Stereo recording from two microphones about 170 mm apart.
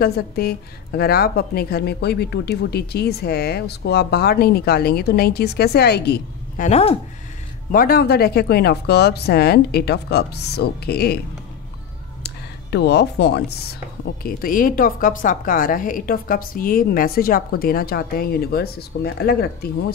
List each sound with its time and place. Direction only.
0.0 s a woman's voice: 65° left (ahead or behind)
6.6 s speech: 40° left (ahead or behind)
7.7 s a woman's voice: 60° left (ahead or behind)
12.7 s a woman's voice: 75° left (ahead or behind)
14.2 s a woman's voice: 55° left (ahead or behind)